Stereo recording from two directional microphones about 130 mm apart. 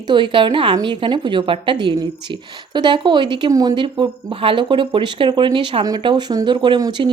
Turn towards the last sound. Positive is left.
turn(degrees=-35)  # may be behind; listen again after turning